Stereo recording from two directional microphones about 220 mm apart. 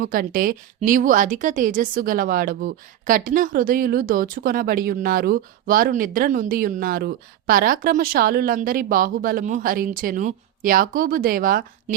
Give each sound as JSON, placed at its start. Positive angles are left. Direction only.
{"t": 0.0, "sound": "a woman's voice", "side_deg": -40}